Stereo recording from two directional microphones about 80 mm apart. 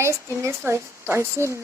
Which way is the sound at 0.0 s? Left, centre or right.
Right.